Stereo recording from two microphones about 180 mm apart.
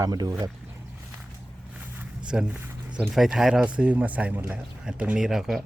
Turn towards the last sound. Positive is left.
turn(degrees=0)  # may be behind; listen again after turning